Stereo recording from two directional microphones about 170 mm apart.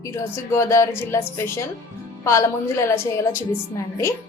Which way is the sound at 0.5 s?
15° left (ahead or behind).